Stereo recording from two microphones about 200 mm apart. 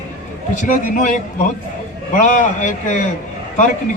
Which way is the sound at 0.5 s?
40° left (ahead or behind).